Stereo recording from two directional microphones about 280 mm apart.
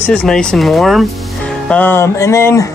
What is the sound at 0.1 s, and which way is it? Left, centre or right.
Speech, centre.